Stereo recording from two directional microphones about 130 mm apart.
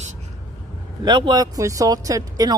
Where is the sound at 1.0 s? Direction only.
35° right (ahead or behind).